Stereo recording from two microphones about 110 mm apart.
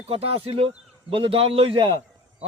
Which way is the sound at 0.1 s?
60° right (ahead or behind).